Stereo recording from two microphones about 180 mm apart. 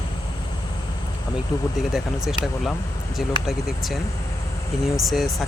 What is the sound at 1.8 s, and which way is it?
Speech, centre (ahead or behind).